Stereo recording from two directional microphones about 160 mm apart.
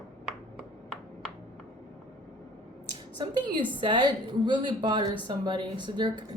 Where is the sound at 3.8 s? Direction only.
30° right (ahead or behind).